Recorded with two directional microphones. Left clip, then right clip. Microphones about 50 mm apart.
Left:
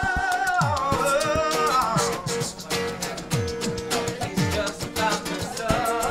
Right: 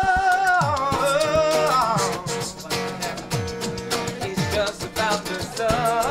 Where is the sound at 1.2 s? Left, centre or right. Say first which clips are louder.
Right 4 dB; right.